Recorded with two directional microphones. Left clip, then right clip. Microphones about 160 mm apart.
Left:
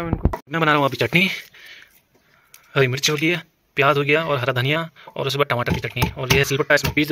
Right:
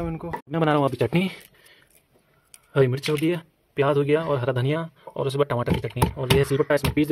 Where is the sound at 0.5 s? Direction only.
10° right (ahead or behind).